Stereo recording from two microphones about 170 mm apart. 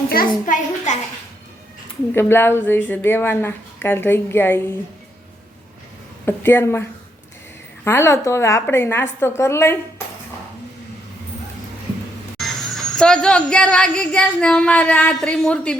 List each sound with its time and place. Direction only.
0.1 s a child's voice: 55° left (ahead or behind)
2.1 s a woman's voice: 15° left (ahead or behind)
6.2 s a woman's voice: 15° left (ahead or behind)
7.9 s a woman's voice: 15° left (ahead or behind)
12.4 s speech: 5° left (ahead or behind)